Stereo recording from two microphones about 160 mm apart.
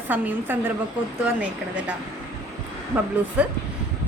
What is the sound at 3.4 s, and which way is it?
Speech, 5° right (ahead or behind).